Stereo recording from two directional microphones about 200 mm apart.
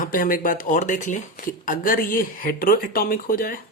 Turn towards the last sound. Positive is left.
turn(degrees=45)  # may be behind; listen again after turning